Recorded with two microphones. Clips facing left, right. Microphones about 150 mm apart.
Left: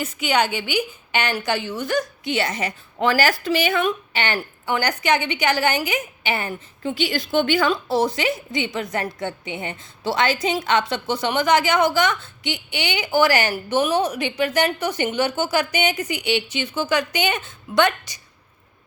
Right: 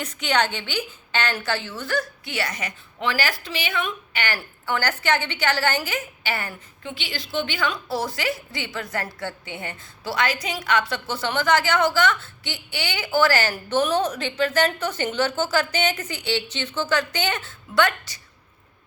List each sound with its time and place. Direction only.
0.0 s a woman's voice: 10° left (ahead or behind); by 2.7 s 30° left (ahead or behind)
3.0 s speech: 40° left (ahead or behind)
4.1 s a woman's voice: 25° left (ahead or behind)
6.8 s speech: 40° left (ahead or behind)
7.7 s a woman's voice: 25° left (ahead or behind)